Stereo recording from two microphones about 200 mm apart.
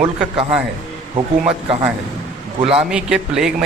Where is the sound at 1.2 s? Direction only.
25° right (ahead or behind).